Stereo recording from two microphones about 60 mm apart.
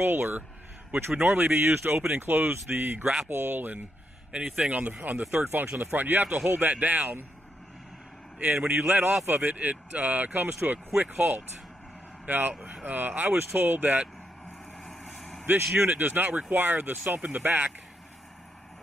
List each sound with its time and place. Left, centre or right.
0.0 s speech: right
1.7 s speech: right
4.3 s speech: centre; by 7.2 s right
8.4 s speech: right
8.7 s speech: right
14.8 s vehicle: centre
15.4 s speech: right